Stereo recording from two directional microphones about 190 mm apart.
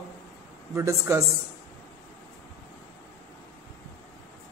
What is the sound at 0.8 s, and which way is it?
Speech, 15° right (ahead or behind).